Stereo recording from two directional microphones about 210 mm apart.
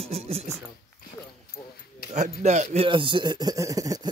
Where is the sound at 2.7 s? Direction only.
25° right (ahead or behind).